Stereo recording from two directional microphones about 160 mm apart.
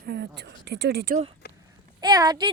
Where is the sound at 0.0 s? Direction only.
85° right.